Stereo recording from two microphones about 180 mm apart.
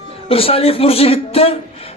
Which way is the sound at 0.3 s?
30° left (ahead or behind).